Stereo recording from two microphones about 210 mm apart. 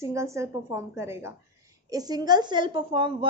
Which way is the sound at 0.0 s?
15° right (ahead or behind).